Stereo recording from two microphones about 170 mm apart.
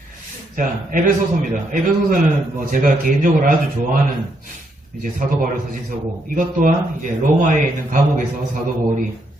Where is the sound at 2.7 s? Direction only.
50° right (ahead or behind).